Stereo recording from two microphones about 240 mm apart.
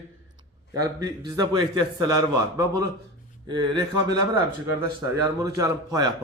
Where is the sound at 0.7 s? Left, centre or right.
Centre.